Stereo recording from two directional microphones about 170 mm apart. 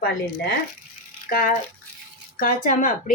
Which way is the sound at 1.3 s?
60° left (ahead or behind).